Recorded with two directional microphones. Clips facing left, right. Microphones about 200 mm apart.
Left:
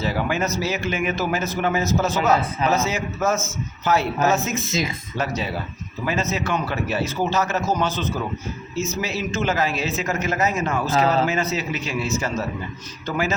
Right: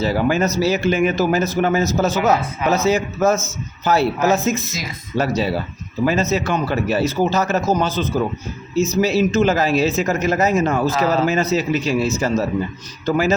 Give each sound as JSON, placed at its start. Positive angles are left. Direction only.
{"t": 0.0, "sound": "speech", "side_deg": -35}